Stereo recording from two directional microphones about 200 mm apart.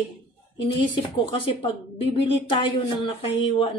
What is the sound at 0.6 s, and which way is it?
A woman's voice, 25° left (ahead or behind).